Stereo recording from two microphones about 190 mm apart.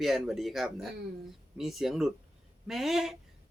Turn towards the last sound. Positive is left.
turn(degrees=0)  # may be behind; listen again after turning